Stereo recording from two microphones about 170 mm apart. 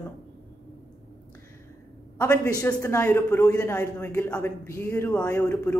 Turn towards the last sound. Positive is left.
turn(degrees=15)  # may be behind; listen again after turning